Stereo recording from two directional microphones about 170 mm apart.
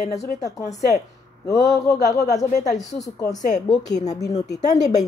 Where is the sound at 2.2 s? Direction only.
20° left (ahead or behind).